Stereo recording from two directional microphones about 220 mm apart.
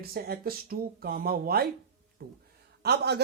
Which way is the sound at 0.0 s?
45° right (ahead or behind).